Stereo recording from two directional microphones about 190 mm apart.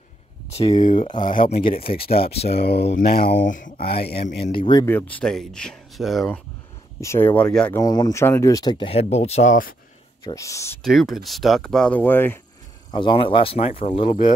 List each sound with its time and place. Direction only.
0.5 s speech: 35° left (ahead or behind)
1.8 s speech: 30° left (ahead or behind)
2.0 s speech: 55° left (ahead or behind)
4.5 s speech: 25° left (ahead or behind)
4.8 s speech: 10° left (ahead or behind)
7.0 s speech: 15° left (ahead or behind)
7.8 s speech: 20° left (ahead or behind); by 9.8 s 45° left (ahead or behind)
10.2 s speech: 15° left (ahead or behind)
10.8 s speech: centre (ahead or behind)
12.9 s speech: 25° left (ahead or behind)